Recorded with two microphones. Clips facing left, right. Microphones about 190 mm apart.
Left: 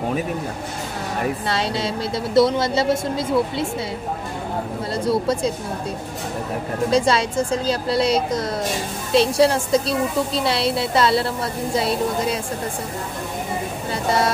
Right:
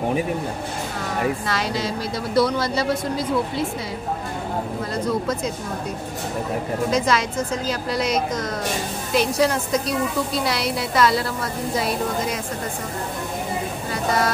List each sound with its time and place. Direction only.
1.5 s a woman's voice: 30° left (ahead or behind)
4.9 s speech: 30° left (ahead or behind)
6.9 s a woman's voice: 30° left (ahead or behind)